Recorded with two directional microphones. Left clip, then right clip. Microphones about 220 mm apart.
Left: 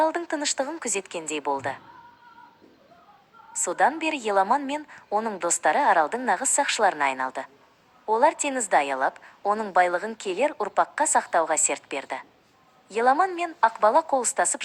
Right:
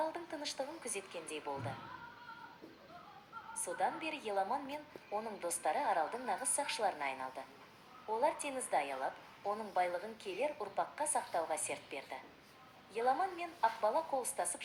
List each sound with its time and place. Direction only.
0.0 s a woman's voice: 45° left (ahead or behind)
3.6 s a woman's voice: 45° left (ahead or behind)